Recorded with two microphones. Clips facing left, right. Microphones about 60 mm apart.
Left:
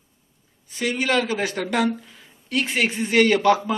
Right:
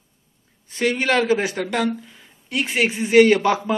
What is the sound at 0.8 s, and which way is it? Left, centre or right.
Speech, right.